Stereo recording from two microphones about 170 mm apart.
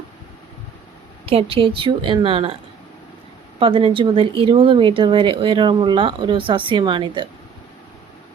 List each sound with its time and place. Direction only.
1.2 s speech: 35° right (ahead or behind)
3.6 s speech: 30° right (ahead or behind)